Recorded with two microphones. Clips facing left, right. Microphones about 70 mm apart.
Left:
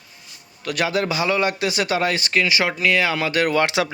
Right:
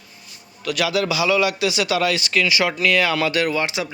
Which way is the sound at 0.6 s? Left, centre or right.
Left.